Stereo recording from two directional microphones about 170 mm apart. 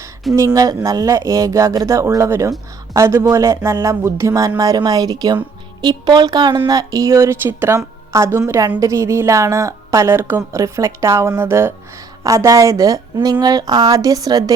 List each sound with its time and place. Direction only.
0.3 s a woman's voice: 20° right (ahead or behind)